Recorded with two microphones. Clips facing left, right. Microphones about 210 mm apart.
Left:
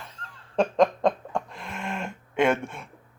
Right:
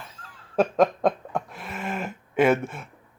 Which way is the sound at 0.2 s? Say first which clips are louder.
Right 2 dB; 5° right (ahead or behind).